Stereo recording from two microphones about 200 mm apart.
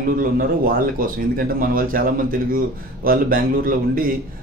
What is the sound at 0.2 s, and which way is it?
Speech, 45° right (ahead or behind).